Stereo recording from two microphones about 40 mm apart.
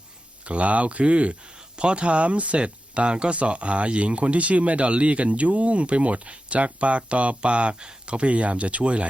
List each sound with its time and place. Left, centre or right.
0.4 s speech: right